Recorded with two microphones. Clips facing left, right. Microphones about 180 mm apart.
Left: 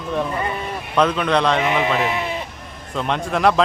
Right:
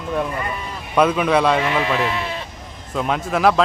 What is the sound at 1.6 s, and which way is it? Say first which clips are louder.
Speech: left 1 dB; 20° left (ahead or behind).